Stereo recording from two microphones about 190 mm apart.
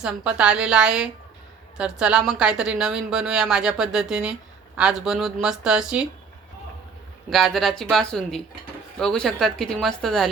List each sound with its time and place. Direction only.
0.0 s a woman's voice: 5° right (ahead or behind)
7.3 s a woman's voice: centre (ahead or behind)